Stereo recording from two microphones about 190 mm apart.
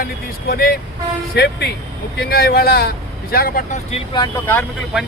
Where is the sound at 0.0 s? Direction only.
50° left (ahead or behind).